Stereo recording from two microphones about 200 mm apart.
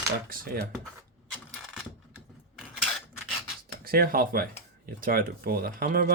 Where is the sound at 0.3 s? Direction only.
45° right (ahead or behind).